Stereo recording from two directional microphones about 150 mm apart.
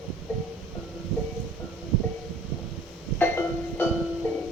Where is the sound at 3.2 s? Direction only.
15° left (ahead or behind).